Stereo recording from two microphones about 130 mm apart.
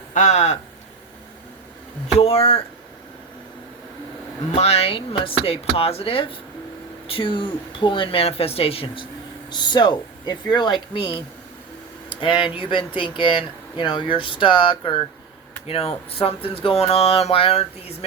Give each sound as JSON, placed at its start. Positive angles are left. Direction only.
{"t": 0.1, "sound": "speech", "side_deg": 65}
{"t": 2.1, "sound": "speech", "side_deg": 50}
{"t": 4.5, "sound": "speech", "side_deg": 55}
{"t": 9.5, "sound": "speech", "side_deg": 35}
{"t": 12.2, "sound": "speech", "side_deg": 40}